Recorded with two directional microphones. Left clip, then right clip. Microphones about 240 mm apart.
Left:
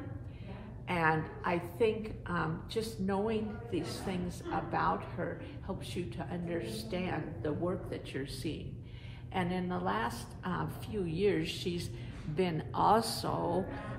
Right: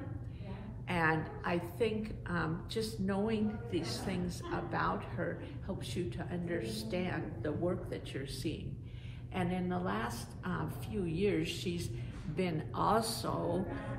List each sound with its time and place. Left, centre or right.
0.8 s a woman's voice: left